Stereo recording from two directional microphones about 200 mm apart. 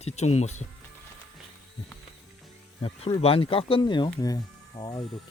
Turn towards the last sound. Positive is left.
turn(degrees=20)  # may be behind; listen again after turning